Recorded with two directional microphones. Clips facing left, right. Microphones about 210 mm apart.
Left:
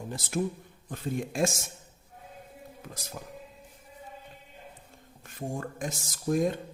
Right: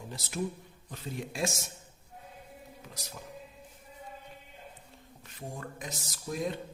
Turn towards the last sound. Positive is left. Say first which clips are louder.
# left 7 dB
turn(degrees=50)  # may be behind; listen again after turning